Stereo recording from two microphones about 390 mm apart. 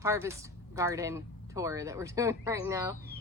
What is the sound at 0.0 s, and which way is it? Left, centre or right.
Speech, centre.